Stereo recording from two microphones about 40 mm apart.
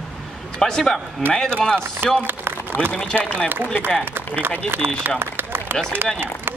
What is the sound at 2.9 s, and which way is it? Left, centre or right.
Speech, left.